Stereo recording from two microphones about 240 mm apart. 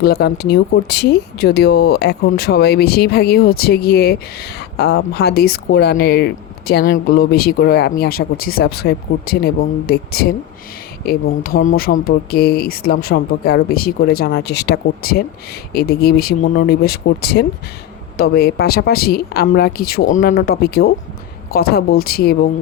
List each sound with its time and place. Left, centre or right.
0.0 s speech: left